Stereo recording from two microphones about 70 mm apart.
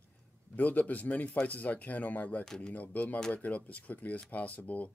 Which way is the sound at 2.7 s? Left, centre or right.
Left.